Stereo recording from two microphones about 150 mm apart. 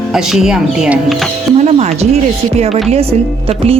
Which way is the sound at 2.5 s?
45° right (ahead or behind).